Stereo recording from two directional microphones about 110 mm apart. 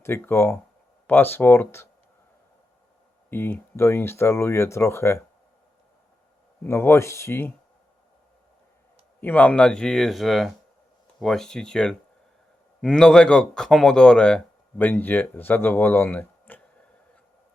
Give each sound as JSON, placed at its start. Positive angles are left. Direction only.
{"t": 0.0, "sound": "speech", "side_deg": 20}
{"t": 3.2, "sound": "speech", "side_deg": 20}
{"t": 6.7, "sound": "speech", "side_deg": 25}
{"t": 9.2, "sound": "speech", "side_deg": 15}